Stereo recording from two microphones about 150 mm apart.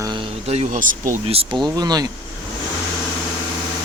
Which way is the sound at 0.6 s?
60° right (ahead or behind).